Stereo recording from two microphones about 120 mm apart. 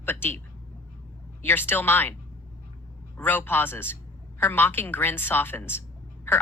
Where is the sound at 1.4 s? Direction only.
20° left (ahead or behind).